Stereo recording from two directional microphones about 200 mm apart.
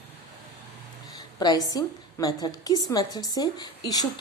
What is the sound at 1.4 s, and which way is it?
A woman's voice, 20° left (ahead or behind).